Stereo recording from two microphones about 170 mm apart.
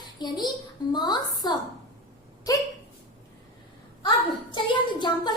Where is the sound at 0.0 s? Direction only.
25° left (ahead or behind).